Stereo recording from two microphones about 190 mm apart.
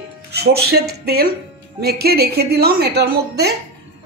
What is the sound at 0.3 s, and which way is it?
A woman's voice, 55° right (ahead or behind).